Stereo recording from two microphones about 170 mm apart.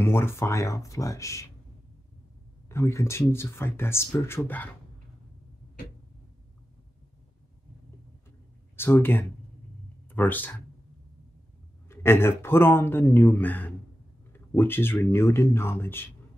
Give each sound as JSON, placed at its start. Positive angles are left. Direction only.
{"t": 0.0, "sound": "speech", "side_deg": 15}
{"t": 2.7, "sound": "speech", "side_deg": 15}
{"t": 8.7, "sound": "speech", "side_deg": 15}
{"t": 11.9, "sound": "speech", "side_deg": 15}